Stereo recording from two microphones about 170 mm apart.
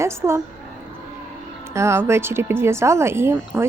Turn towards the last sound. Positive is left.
turn(degrees=-10)  # may be behind; listen again after turning